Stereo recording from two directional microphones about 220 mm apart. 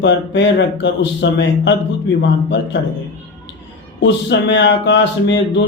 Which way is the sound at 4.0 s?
55° left (ahead or behind).